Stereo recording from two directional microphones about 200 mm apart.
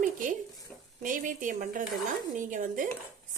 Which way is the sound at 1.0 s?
40° right (ahead or behind).